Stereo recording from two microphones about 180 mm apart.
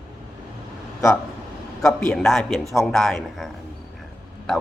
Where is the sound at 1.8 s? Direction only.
5° left (ahead or behind).